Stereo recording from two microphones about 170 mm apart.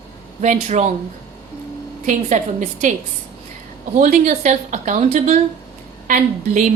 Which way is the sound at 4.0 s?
45° right (ahead or behind).